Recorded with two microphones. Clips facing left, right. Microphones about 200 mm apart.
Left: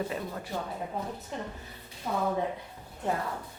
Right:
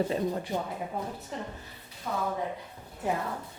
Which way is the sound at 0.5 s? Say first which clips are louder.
Right 3 dB; 20° right (ahead or behind).